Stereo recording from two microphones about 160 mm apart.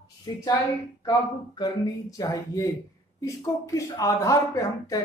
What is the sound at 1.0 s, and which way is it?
Speech, 25° left (ahead or behind).